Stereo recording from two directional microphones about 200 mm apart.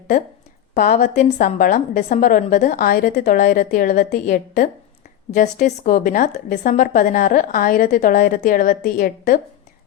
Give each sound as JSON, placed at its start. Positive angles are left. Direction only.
{"t": 0.7, "sound": "a woman's voice", "side_deg": 40}